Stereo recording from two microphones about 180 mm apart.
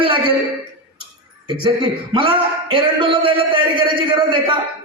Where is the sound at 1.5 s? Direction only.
30° right (ahead or behind).